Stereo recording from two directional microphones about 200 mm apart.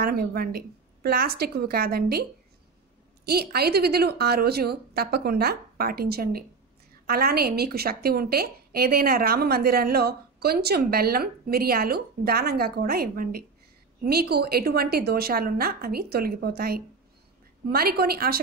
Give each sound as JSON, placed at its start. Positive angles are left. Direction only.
{"t": 0.0, "sound": "a woman's voice", "side_deg": -50}
{"t": 3.3, "sound": "a woman's voice", "side_deg": -50}